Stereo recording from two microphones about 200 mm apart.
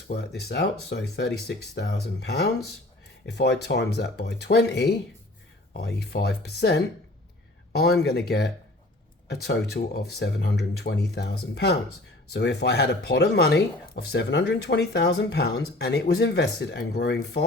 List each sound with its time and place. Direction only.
0.1 s speech: 55° left (ahead or behind)